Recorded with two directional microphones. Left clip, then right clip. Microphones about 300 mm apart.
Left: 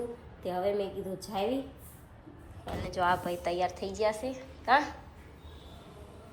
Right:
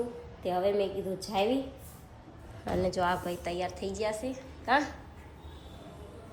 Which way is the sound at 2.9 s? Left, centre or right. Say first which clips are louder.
Left 3 dB; centre.